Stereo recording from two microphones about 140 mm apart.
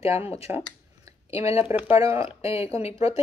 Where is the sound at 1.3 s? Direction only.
20° right (ahead or behind).